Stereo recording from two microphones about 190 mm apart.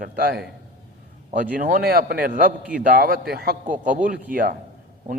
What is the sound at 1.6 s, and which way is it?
A man's voice, 50° right (ahead or behind).